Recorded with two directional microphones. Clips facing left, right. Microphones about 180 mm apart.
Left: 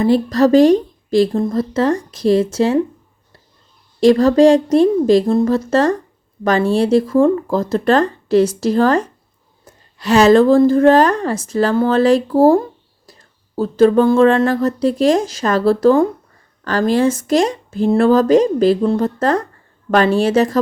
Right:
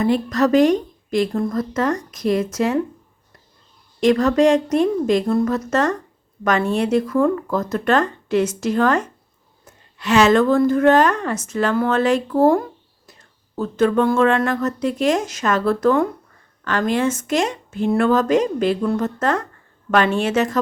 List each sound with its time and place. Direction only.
0.0 s a woman's voice: 30° left (ahead or behind)
4.0 s speech: 30° left (ahead or behind)